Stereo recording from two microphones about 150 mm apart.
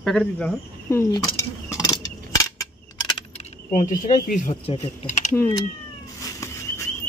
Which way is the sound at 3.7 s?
60° left (ahead or behind).